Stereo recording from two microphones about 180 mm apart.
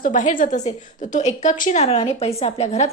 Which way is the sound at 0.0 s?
45° left (ahead or behind).